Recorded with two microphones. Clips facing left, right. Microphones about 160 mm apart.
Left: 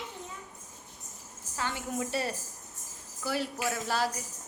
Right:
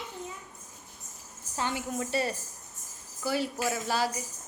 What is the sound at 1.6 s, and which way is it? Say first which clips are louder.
Speech: right 3 dB; 20° right (ahead or behind).